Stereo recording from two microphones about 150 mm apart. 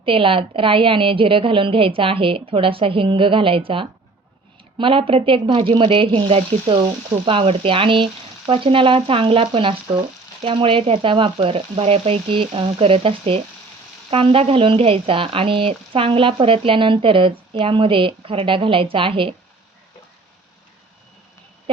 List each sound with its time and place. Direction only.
0.0 s speech: 35° right (ahead or behind)